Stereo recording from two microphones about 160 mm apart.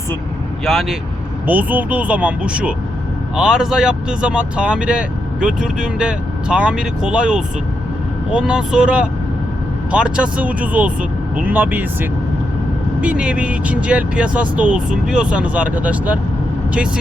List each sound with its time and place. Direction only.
0.6 s speech: centre (ahead or behind)